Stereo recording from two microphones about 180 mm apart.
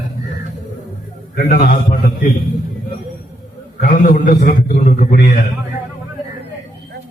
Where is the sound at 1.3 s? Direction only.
55° left (ahead or behind).